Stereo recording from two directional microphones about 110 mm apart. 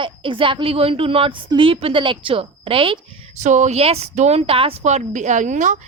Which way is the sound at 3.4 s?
90° right.